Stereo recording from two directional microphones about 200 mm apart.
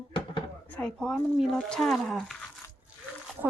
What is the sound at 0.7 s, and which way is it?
A woman's voice, 5° left (ahead or behind).